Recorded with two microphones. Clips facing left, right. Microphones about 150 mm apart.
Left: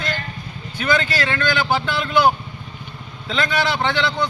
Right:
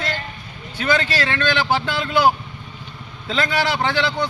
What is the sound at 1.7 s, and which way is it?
Speech, 5° right (ahead or behind).